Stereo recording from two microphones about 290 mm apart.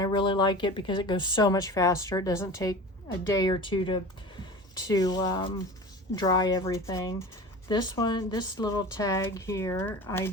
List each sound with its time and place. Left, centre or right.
0.0 s speech: centre